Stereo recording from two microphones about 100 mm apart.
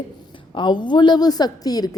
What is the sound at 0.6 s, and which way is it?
A woman's voice, 50° left (ahead or behind).